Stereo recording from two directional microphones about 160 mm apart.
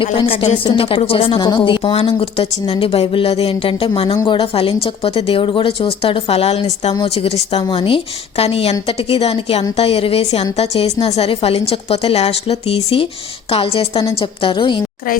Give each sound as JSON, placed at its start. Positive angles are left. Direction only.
{"t": 0.0, "sound": "speech", "side_deg": 35}